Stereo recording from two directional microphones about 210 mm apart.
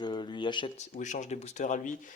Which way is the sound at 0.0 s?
20° left (ahead or behind).